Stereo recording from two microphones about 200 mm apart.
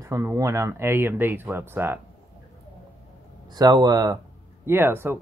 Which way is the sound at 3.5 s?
20° right (ahead or behind).